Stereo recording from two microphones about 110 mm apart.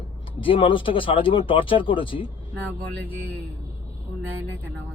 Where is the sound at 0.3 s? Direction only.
50° left (ahead or behind).